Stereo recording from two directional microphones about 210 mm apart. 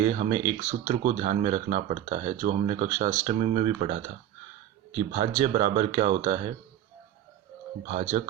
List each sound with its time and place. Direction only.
0.0 s speech: 35° right (ahead or behind)